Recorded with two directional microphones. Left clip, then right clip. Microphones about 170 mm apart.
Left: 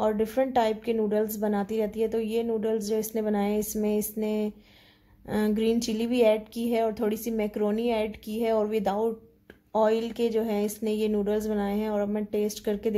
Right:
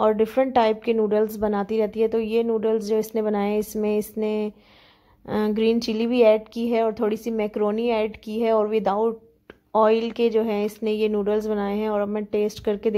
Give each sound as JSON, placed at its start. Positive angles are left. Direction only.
{"t": 0.0, "sound": "a woman's voice", "side_deg": -25}